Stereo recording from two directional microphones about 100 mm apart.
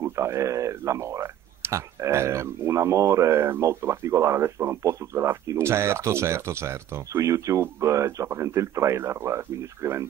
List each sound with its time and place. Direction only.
0.0 s speech: 30° right (ahead or behind)